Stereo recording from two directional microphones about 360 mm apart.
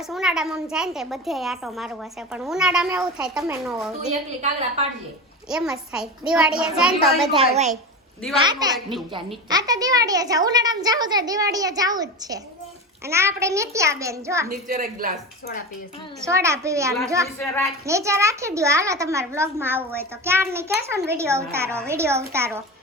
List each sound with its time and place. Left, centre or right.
0.0 s a child's voice: centre
4.1 s a child's voice: centre
5.5 s a child's voice: centre
7.3 s a woman's voice: centre
14.5 s a woman's voice: right
16.2 s a child's voice: centre
17.8 s a child's voice: centre